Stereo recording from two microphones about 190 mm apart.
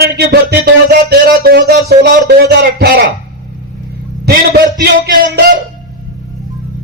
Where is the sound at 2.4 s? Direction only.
65° right (ahead or behind).